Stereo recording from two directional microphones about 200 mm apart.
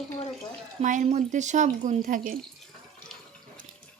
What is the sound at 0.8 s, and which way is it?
A woman's voice, 35° right (ahead or behind).